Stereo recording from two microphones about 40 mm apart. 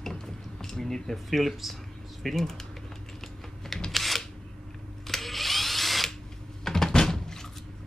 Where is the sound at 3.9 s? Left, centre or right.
Centre.